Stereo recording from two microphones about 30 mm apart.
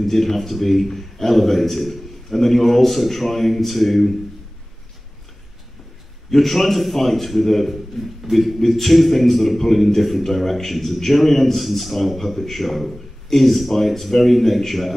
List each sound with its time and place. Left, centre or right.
0.0 s a man's voice: centre
6.3 s a man's voice: centre